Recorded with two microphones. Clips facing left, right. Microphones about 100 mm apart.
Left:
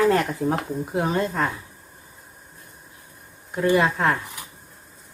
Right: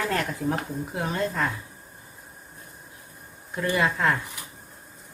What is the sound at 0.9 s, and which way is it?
Speech, 20° left (ahead or behind).